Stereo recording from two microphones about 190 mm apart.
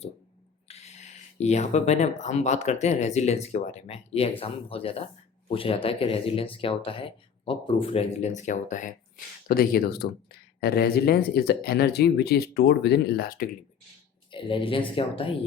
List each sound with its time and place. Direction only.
0.7 s speech: 35° left (ahead or behind)
14.3 s speech: 25° left (ahead or behind)